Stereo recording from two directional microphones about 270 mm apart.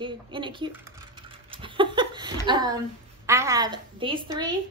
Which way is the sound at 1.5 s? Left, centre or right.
Centre.